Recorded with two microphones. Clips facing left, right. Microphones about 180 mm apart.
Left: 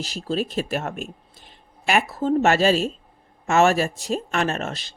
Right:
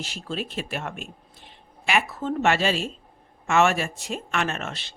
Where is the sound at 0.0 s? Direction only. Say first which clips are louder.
Left 6 dB; 40° left (ahead or behind).